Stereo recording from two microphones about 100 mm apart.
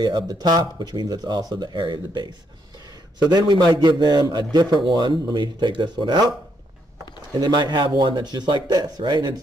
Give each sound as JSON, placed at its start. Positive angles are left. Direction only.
{"t": 0.0, "sound": "a man's voice", "side_deg": -45}
{"t": 7.3, "sound": "a man's voice", "side_deg": -45}